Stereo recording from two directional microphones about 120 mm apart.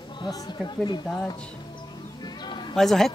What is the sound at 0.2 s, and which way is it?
Speech, 40° left (ahead or behind).